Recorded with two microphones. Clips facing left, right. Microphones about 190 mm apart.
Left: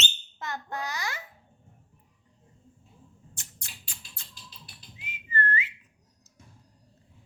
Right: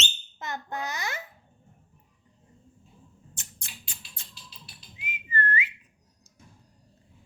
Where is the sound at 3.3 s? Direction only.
20° right (ahead or behind).